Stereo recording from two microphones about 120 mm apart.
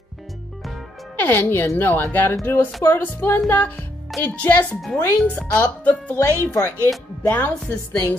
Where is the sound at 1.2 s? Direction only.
15° left (ahead or behind).